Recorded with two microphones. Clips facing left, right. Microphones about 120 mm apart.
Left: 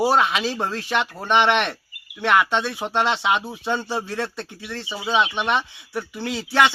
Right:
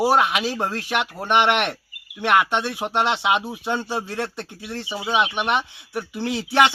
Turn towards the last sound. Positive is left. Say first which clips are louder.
# right 1 dB
turn(degrees=-20)  # may be behind; listen again after turning